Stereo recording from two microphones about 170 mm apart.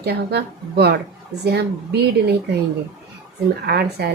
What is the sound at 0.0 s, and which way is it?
A woman's voice, 70° right (ahead or behind).